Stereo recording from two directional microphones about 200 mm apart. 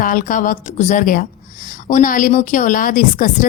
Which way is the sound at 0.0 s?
40° left (ahead or behind).